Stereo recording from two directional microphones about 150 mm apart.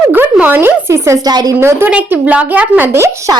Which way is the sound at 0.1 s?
10° right (ahead or behind).